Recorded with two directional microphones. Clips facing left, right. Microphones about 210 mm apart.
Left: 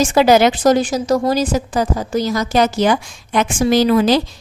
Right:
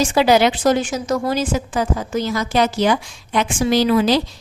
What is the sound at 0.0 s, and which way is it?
Speech, 45° left (ahead or behind).